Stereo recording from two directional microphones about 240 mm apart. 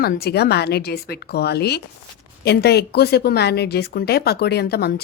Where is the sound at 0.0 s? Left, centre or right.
Left.